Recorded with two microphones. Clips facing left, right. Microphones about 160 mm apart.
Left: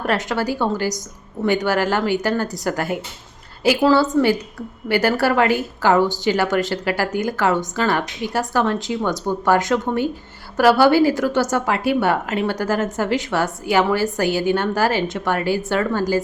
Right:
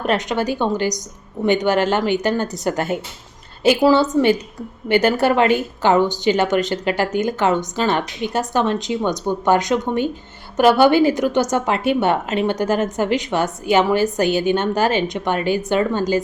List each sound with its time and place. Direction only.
0.0 s a woman's voice: 20° right (ahead or behind)